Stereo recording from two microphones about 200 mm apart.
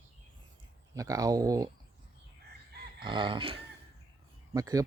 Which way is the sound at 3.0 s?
25° right (ahead or behind).